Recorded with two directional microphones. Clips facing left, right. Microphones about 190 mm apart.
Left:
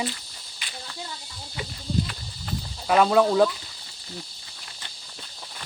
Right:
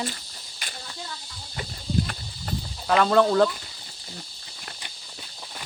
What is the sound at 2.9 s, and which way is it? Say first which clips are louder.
Speech: left 1 dB; 10° left (ahead or behind).